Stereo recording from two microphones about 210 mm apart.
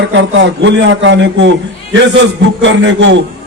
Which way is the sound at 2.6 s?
60° right (ahead or behind).